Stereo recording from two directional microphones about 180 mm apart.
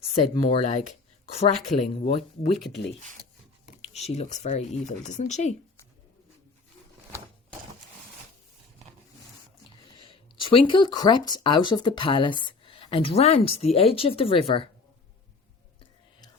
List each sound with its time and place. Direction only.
0.5 s speech: 40° left (ahead or behind)
3.8 s speech: 35° left (ahead or behind)
9.9 s speech: 30° left (ahead or behind)